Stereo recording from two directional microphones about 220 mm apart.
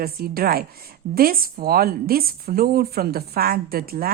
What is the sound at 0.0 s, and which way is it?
Speech, 45° right (ahead or behind).